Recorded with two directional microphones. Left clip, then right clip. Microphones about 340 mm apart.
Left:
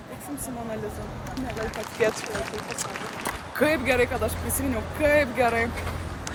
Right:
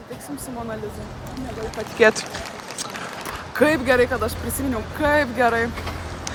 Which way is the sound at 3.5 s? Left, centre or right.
Centre.